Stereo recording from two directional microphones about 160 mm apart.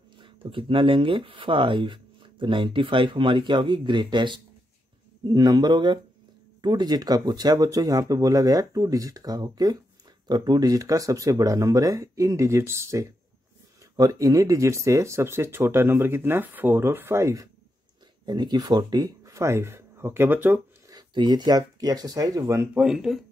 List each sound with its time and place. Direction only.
0.2 s speech: 35° right (ahead or behind); by 20.6 s 10° right (ahead or behind)
20.9 s speech: 25° right (ahead or behind)
22.8 s speech: 5° right (ahead or behind)